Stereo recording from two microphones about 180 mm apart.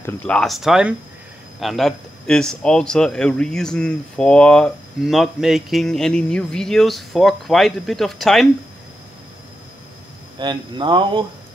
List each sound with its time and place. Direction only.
0.0 s a man's voice: 5° left (ahead or behind)
10.4 s speech: 25° right (ahead or behind)